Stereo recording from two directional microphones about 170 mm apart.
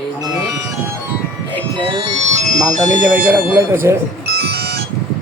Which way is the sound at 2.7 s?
45° right (ahead or behind).